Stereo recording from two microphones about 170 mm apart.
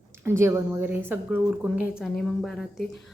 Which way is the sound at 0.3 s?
15° right (ahead or behind).